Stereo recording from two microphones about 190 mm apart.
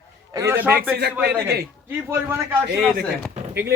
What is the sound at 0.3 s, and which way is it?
Speech, 10° right (ahead or behind).